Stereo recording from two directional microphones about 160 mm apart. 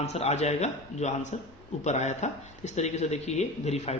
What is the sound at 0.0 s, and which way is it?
Speech, 40° left (ahead or behind).